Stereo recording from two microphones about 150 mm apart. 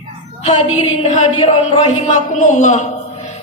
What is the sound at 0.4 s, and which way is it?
A woman's voice, 40° left (ahead or behind).